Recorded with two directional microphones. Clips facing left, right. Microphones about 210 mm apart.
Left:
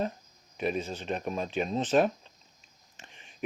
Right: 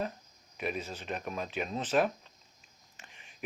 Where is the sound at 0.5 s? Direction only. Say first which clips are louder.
Left 5 dB; 30° left (ahead or behind).